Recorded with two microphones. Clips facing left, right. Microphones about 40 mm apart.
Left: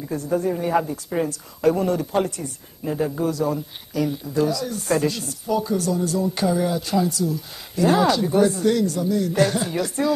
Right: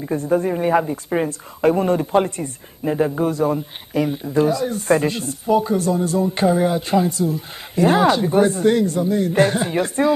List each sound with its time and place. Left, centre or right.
0.0 s speech: right